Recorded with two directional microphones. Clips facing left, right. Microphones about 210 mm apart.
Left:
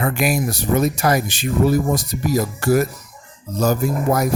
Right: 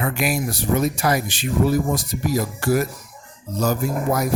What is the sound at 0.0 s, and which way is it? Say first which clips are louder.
Speech: left 3 dB; 45° left (ahead or behind).